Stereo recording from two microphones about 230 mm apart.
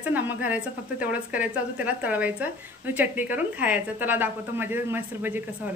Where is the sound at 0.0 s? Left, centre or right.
Centre.